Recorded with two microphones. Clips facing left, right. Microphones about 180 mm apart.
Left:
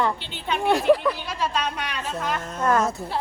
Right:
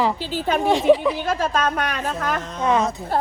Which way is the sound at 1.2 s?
50° right (ahead or behind).